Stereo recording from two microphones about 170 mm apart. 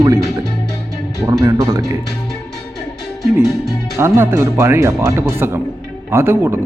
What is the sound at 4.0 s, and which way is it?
Speech, 15° right (ahead or behind).